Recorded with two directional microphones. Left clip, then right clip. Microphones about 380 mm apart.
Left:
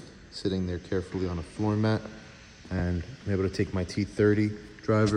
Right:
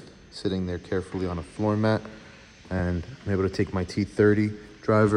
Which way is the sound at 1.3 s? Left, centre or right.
Right.